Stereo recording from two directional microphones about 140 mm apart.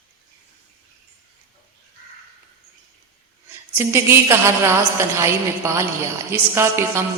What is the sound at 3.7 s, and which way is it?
A woman's voice, 15° right (ahead or behind).